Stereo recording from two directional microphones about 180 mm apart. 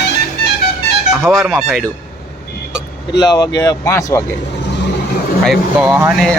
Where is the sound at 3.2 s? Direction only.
20° left (ahead or behind).